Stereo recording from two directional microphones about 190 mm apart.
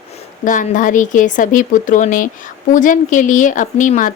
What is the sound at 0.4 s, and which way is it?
A woman's voice, 45° left (ahead or behind).